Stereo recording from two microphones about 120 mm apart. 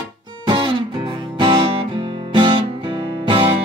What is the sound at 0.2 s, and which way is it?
Music, 40° right (ahead or behind).